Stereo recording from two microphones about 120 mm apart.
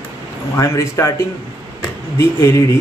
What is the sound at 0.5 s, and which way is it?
Speech, 25° left (ahead or behind).